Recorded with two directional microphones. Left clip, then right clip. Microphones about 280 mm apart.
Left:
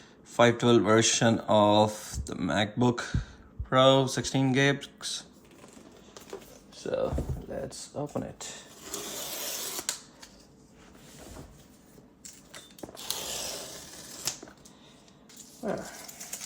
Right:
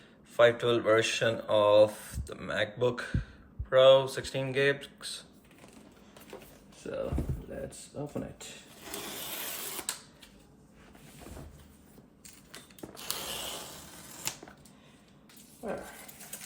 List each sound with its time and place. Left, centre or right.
0.3 s speech: left
6.8 s speech: left
8.8 s filing: centre
13.0 s a sound: centre
15.6 s speech: left